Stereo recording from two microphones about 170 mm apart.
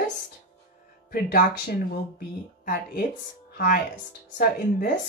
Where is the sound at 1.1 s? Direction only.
60° left (ahead or behind).